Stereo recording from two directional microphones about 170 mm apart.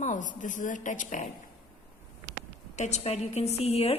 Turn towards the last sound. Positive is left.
turn(degrees=35)  # may be behind; listen again after turning